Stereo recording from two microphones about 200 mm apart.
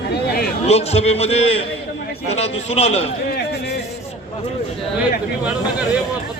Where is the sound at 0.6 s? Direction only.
30° left (ahead or behind).